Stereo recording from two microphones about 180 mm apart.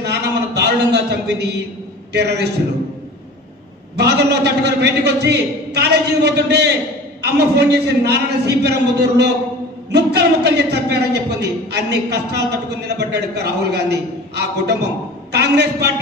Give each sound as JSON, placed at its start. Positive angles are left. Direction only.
{"t": 0.0, "sound": "a sound", "side_deg": -65}
{"t": 2.1, "sound": "a woman's voice", "side_deg": -65}
{"t": 3.9, "sound": "a woman's voice", "side_deg": -65}